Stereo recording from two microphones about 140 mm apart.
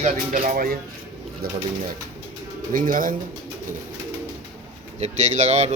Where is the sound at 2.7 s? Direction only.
75° right (ahead or behind).